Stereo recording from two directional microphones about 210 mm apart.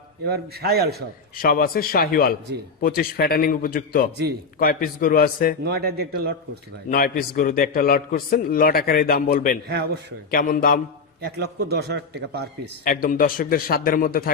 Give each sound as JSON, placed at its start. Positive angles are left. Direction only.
{"t": 0.3, "sound": "a man's voice", "side_deg": -50}
{"t": 1.4, "sound": "a man's voice", "side_deg": 45}
{"t": 5.6, "sound": "a man's voice", "side_deg": -50}
{"t": 6.9, "sound": "a man's voice", "side_deg": 45}
{"t": 9.6, "sound": "a man's voice", "side_deg": -50}
{"t": 10.3, "sound": "a man's voice", "side_deg": 40}
{"t": 11.7, "sound": "a man's voice", "side_deg": -50}
{"t": 12.8, "sound": "a man's voice", "side_deg": 40}